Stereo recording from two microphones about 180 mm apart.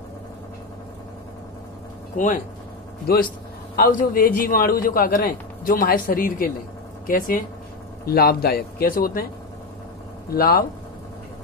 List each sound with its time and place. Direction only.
2.1 s a man's voice: 45° left (ahead or behind)
3.1 s a man's voice: 60° left (ahead or behind)
10.3 s speech: 55° left (ahead or behind)